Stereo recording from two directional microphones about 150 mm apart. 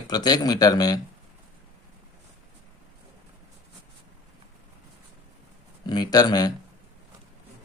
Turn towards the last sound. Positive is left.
turn(degrees=25)  # may be behind; listen again after turning